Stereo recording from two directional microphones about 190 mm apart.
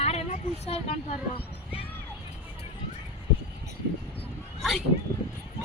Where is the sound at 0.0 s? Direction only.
35° left (ahead or behind).